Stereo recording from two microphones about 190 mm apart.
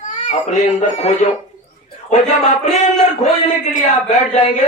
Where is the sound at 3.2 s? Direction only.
40° left (ahead or behind).